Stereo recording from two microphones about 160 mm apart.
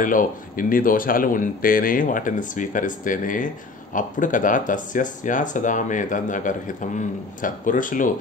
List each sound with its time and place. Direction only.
0.0 s speech: 55° left (ahead or behind)